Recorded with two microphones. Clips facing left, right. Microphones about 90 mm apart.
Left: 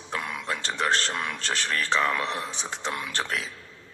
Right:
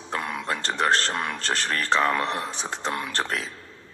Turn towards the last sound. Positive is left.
turn(degrees=-40)  # may be behind; listen again after turning